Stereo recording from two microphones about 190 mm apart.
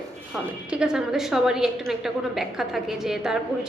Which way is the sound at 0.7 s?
5° right (ahead or behind).